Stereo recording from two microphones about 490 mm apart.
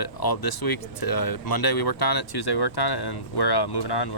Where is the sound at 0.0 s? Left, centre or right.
Left.